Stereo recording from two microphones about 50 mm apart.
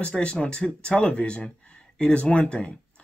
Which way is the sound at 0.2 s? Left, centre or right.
Centre.